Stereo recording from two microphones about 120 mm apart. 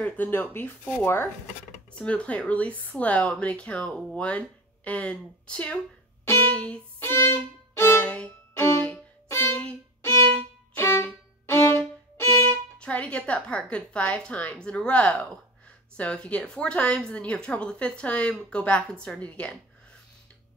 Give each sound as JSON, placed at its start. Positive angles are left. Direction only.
{"t": 0.0, "sound": "speech", "side_deg": 15}
{"t": 6.2, "sound": "music", "side_deg": 20}
{"t": 7.1, "sound": "violin", "side_deg": 20}
{"t": 8.8, "sound": "music", "side_deg": 20}
{"t": 10.1, "sound": "violin", "side_deg": 15}
{"t": 12.7, "sound": "speech", "side_deg": 10}